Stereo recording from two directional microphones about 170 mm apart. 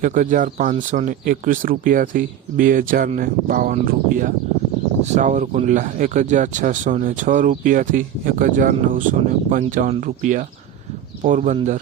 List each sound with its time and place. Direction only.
0.0 s speech: 50° right (ahead or behind)
11.2 s speech: 45° right (ahead or behind)